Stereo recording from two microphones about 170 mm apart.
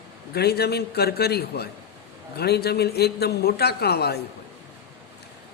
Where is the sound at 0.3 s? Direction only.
70° left (ahead or behind).